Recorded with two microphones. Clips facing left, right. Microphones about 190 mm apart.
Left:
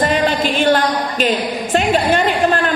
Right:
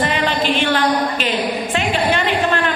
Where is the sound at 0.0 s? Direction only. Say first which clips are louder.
Left 3 dB; 45° left (ahead or behind).